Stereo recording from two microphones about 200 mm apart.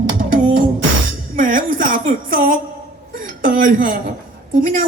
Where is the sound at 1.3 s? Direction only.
40° right (ahead or behind).